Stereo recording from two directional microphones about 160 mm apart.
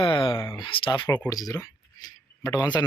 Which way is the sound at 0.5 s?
30° left (ahead or behind).